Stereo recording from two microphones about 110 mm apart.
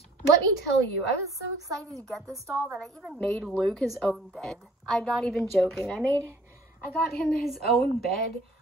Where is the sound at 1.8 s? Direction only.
5° left (ahead or behind).